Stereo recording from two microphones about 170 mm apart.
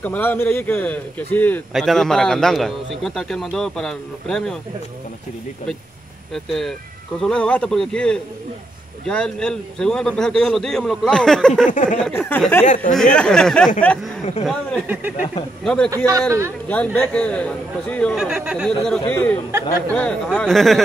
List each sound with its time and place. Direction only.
0.0 s a man's voice: 10° left (ahead or behind)
6.3 s a man's voice: centre (ahead or behind)
11.6 s a sound: 50° left (ahead or behind)
12.0 s speech: 10° left (ahead or behind)
12.6 s a sound: 45° left (ahead or behind)
12.9 s a man's voice: 5° left (ahead or behind)
16.1 s a man's voice: 20° right (ahead or behind)
16.6 s speech: 10° left (ahead or behind)
18.1 s a man's voice: 5° right (ahead or behind)
19.0 s a man's voice: 10° left (ahead or behind)